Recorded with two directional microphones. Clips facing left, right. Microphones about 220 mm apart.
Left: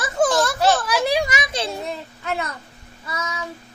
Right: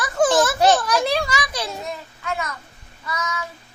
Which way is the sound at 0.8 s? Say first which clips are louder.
Left 1 dB; 5° left (ahead or behind).